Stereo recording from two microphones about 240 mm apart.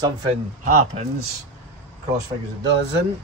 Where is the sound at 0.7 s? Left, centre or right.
Right.